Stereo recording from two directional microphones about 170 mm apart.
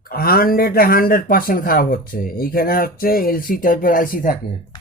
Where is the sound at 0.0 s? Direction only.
60° left (ahead or behind).